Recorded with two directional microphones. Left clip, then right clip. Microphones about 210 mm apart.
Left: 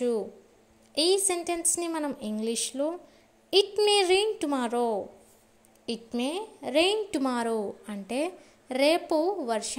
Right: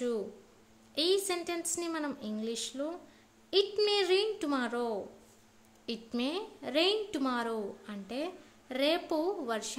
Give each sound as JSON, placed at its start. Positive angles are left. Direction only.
{"t": 0.9, "sound": "a woman's voice", "side_deg": 20}